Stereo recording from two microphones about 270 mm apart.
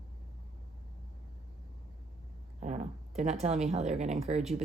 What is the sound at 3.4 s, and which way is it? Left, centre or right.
Speech, right.